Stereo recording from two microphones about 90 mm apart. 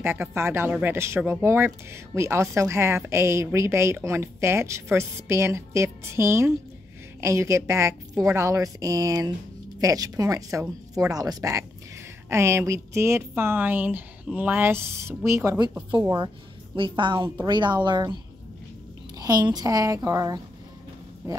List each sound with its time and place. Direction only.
0.0 s a woman's voice: 25° right (ahead or behind)
16.0 s speech: 45° right (ahead or behind)
16.7 s a woman's voice: 70° right (ahead or behind)
19.1 s a sound: 45° right (ahead or behind)
19.5 s a woman's voice: 45° right (ahead or behind)